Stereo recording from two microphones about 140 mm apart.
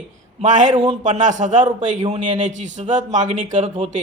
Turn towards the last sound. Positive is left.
turn(degrees=-55)  # may be behind; listen again after turning